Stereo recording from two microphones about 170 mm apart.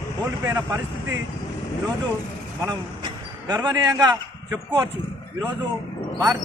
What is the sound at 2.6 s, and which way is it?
A man's voice, 25° right (ahead or behind).